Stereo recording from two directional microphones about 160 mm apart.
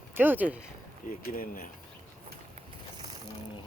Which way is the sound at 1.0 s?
60° left (ahead or behind).